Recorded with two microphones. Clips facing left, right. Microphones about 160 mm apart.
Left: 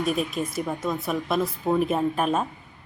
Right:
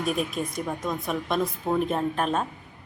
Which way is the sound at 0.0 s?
Centre (ahead or behind).